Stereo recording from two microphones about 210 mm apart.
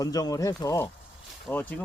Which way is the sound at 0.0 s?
15° left (ahead or behind).